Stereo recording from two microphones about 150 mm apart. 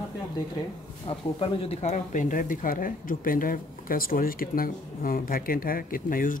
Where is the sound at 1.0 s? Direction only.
35° left (ahead or behind).